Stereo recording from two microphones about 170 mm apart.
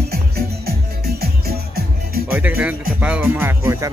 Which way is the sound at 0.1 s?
65° right (ahead or behind).